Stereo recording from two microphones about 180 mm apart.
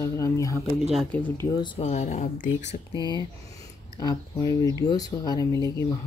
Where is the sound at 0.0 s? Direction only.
15° left (ahead or behind).